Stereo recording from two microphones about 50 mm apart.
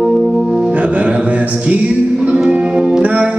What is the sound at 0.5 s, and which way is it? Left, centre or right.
Music, centre.